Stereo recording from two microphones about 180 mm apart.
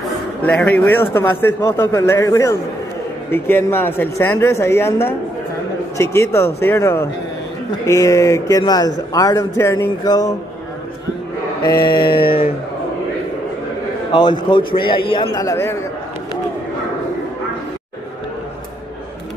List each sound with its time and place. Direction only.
0.4 s a man's voice: 10° left (ahead or behind)
11.6 s speech: 25° left (ahead or behind)
14.1 s speech: 25° left (ahead or behind)